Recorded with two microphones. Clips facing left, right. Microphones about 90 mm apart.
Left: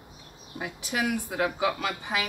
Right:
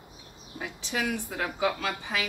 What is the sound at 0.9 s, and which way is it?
Speech, 15° left (ahead or behind).